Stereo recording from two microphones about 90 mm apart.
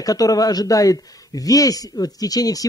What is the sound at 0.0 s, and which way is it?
Speech, 40° left (ahead or behind).